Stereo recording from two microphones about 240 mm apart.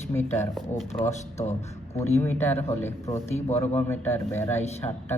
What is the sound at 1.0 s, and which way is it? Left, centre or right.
Speech, left.